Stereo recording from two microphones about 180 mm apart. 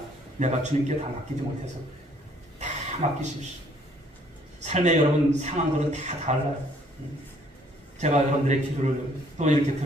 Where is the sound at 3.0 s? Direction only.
40° right (ahead or behind).